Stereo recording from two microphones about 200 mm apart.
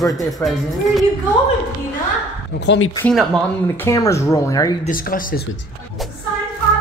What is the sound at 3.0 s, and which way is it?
Speech, centre (ahead or behind).